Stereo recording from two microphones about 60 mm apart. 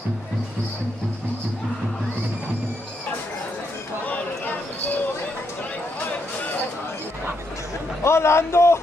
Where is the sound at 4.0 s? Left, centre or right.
Left.